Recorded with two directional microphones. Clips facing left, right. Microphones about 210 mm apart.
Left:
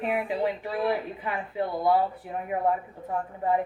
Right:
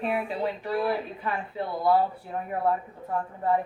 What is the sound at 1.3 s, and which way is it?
Speech, 15° left (ahead or behind).